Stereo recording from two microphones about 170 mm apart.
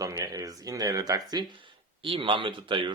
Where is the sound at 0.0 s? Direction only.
20° right (ahead or behind).